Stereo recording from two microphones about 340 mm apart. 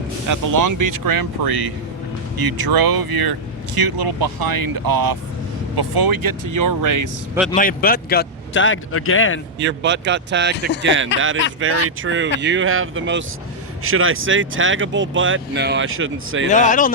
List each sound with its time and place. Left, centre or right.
0.3 s speech: right
7.5 s a man's voice: left
9.6 s speech: right
16.5 s speech: left